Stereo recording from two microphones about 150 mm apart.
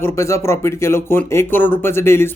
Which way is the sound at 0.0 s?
20° left (ahead or behind).